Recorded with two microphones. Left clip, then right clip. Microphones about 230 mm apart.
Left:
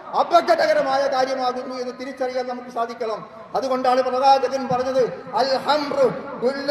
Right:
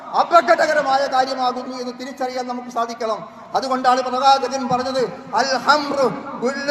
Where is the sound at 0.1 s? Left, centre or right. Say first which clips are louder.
Right 3 dB; centre.